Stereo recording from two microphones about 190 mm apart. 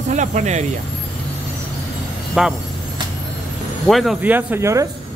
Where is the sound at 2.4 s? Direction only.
5° right (ahead or behind).